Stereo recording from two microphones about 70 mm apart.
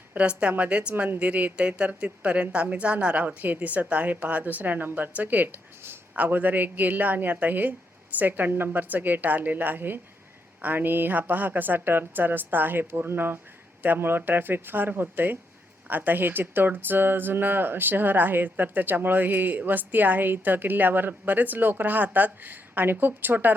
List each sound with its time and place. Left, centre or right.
0.1 s speech: centre